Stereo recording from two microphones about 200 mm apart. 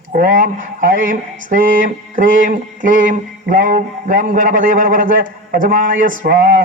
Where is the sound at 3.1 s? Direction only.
40° right (ahead or behind).